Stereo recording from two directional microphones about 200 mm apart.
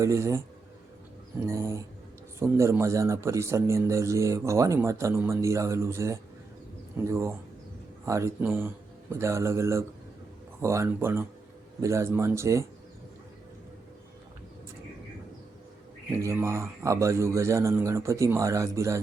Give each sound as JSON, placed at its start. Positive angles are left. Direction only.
{"t": 0.0, "sound": "a man's voice", "side_deg": -15}
{"t": 1.5, "sound": "a man's voice", "side_deg": -15}
{"t": 16.1, "sound": "a man's voice", "side_deg": -15}